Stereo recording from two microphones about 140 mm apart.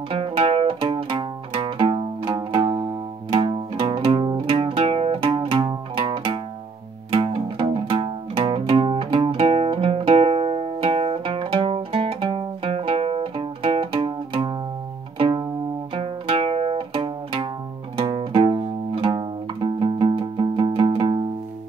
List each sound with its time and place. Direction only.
0.1 s music: 40° right (ahead or behind)